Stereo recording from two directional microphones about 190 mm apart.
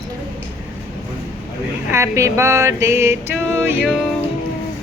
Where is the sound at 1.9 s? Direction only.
15° right (ahead or behind).